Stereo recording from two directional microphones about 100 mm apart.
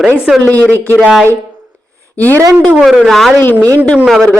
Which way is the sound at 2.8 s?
Centre (ahead or behind).